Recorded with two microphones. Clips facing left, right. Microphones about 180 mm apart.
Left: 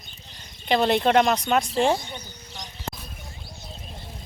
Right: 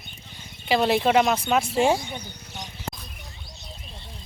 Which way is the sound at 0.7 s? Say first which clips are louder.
Even; 5° right (ahead or behind).